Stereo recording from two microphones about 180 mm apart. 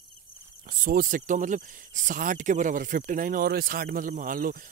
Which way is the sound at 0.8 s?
50° right (ahead or behind).